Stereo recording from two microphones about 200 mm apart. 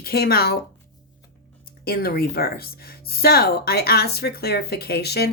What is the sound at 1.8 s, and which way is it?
Speech, 50° left (ahead or behind).